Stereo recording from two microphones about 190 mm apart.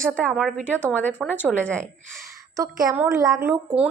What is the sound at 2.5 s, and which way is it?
Speech, 15° right (ahead or behind).